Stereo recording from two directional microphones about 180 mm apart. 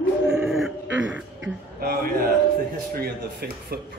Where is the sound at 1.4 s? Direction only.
55° right (ahead or behind).